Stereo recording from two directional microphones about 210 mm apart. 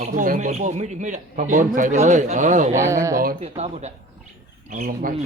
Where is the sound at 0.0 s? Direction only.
40° right (ahead or behind).